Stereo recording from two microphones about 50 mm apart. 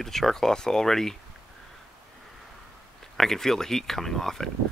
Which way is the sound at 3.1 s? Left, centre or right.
Centre.